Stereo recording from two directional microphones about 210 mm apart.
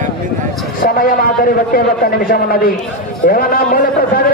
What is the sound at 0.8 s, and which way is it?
A man's voice, 40° left (ahead or behind).